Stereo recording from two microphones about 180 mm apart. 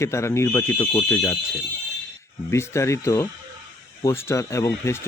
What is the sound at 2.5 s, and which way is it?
Speech, 15° left (ahead or behind).